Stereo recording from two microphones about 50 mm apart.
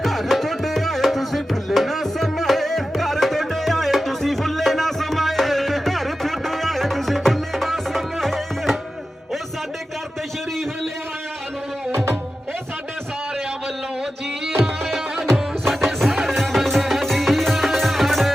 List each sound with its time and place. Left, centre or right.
0.0 s music: centre
11.9 s music: right
15.6 s music: centre